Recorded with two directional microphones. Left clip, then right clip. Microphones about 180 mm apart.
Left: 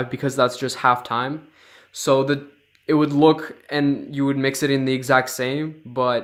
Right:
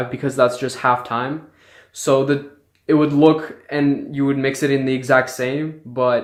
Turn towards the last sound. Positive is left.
turn(degrees=50)  # may be behind; listen again after turning